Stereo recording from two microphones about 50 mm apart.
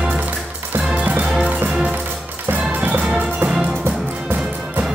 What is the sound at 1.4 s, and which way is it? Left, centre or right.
Music, right.